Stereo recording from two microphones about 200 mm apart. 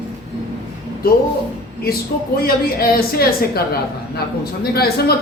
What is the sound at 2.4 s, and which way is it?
Speech, 50° left (ahead or behind).